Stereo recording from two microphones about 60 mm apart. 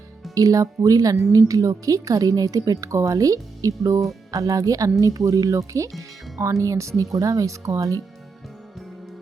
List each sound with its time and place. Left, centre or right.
0.3 s a woman's voice: right